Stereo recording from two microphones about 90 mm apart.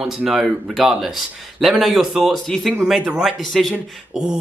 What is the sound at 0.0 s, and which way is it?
A man's voice, 5° right (ahead or behind).